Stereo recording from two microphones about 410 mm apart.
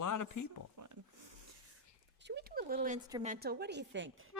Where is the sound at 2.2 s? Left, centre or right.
Right.